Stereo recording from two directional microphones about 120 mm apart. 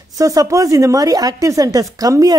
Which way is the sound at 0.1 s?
30° right (ahead or behind).